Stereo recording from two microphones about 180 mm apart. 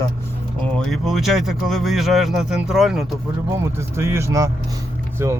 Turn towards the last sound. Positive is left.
turn(degrees=-15)  # may be behind; listen again after turning